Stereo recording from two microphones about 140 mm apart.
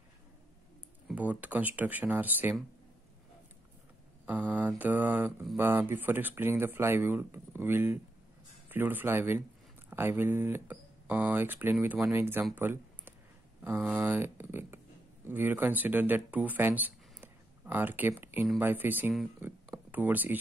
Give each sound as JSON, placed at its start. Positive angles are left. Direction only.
{"t": 1.0, "sound": "speech", "side_deg": -10}
{"t": 4.3, "sound": "mantra", "side_deg": -15}
{"t": 5.6, "sound": "speech", "side_deg": -15}
{"t": 12.5, "sound": "a sound", "side_deg": -15}
{"t": 13.6, "sound": "speech", "side_deg": -15}